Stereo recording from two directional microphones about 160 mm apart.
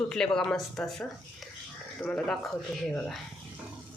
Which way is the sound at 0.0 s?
5° left (ahead or behind).